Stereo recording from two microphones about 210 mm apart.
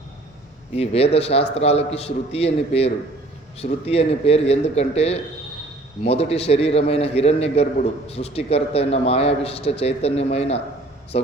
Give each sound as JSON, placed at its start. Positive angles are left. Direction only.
{"t": 0.8, "sound": "a man's voice", "side_deg": 30}